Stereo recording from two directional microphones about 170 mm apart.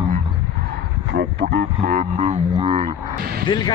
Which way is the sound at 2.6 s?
35° right (ahead or behind).